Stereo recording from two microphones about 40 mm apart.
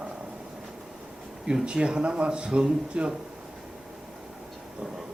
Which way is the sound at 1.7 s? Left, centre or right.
Right.